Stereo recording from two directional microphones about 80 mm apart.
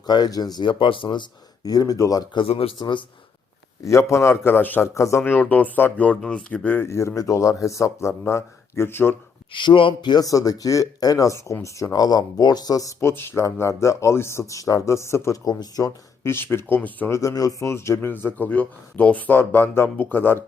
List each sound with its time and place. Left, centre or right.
0.0 s speech: left
0.6 s speech: left
2.3 s speech: left
3.8 s speech: left
4.9 s speech: left
5.2 s speech: left
6.7 s speech: left
9.5 s speech: left
10.2 s speech: left
13.0 s speech: left
15.4 s speech: left
16.2 s speech: left
17.1 s speech: left
17.7 s speech: left